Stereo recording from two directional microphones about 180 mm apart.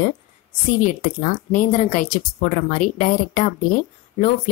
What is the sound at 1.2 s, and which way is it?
Speech, 45° left (ahead or behind).